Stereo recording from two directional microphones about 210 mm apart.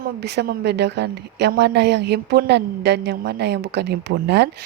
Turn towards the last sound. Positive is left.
turn(degrees=-50)  # may be behind; listen again after turning